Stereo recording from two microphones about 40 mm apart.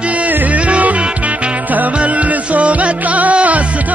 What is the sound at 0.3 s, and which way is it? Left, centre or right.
Music, right.